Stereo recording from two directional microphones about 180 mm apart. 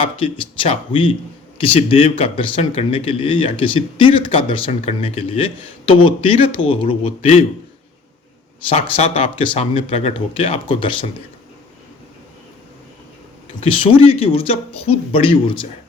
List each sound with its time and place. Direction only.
0.0 s speech: 30° left (ahead or behind)
8.7 s speech: 35° left (ahead or behind)
13.7 s speech: 30° left (ahead or behind)